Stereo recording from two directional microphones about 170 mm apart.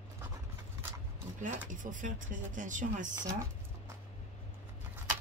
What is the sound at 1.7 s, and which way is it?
Speech, 50° right (ahead or behind).